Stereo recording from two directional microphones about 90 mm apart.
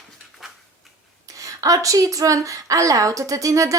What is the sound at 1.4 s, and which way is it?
Speech, 40° right (ahead or behind).